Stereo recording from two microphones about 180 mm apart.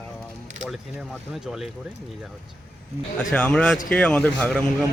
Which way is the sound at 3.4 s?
5° left (ahead or behind).